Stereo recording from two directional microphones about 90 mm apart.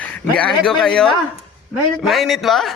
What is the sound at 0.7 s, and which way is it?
A man's voice, 5° left (ahead or behind).